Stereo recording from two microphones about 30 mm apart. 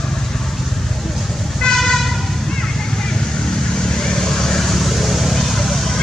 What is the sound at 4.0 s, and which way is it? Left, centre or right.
Vehicle, centre.